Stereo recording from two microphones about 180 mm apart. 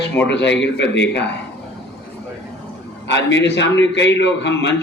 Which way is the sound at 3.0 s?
80° left.